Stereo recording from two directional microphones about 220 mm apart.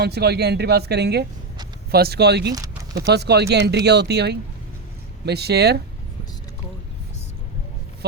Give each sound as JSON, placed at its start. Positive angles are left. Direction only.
{"t": 0.0, "sound": "speech", "side_deg": -45}